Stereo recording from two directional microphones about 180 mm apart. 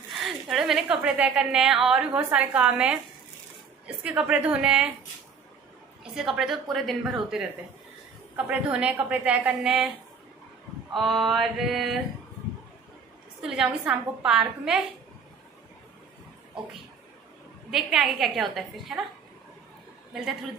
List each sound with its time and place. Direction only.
0.1 s a woman's voice: centre (ahead or behind)
6.1 s a woman's voice: centre (ahead or behind)
8.5 s a woman's voice: 5° right (ahead or behind)
10.9 s a woman's voice: centre (ahead or behind)
13.4 s a woman's voice: 5° right (ahead or behind)
17.6 s a woman's voice: centre (ahead or behind)